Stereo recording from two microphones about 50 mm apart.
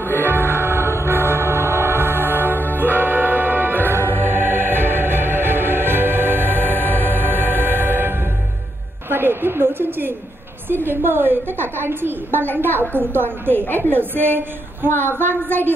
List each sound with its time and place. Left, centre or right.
0.0 s music: left
0.4 s music: right
2.5 s music: left
3.0 s music: right
6.7 s music: left
7.1 s music: right
9.1 s a woman's voice: right